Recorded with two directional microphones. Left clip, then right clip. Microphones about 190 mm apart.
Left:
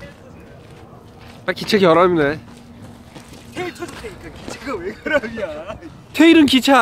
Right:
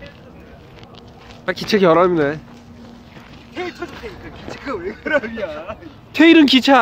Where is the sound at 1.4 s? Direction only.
5° left (ahead or behind).